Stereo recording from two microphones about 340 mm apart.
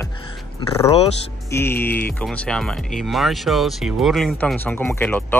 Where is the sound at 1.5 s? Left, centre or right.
Centre.